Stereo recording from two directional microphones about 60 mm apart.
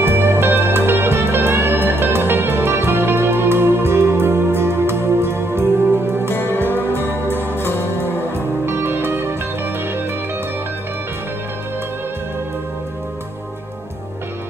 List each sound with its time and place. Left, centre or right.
0.0 s music: right
6.3 s music: left
6.7 s music: right
7.3 s music: left
8.6 s music: right